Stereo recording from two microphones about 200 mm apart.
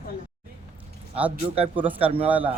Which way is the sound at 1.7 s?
10° right (ahead or behind).